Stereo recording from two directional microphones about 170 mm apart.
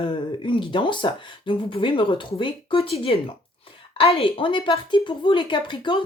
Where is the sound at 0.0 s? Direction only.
30° left (ahead or behind).